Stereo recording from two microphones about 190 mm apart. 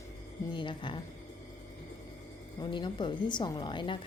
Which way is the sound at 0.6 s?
25° left (ahead or behind).